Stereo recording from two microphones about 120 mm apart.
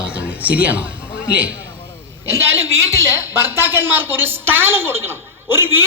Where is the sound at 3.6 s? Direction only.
15° right (ahead or behind).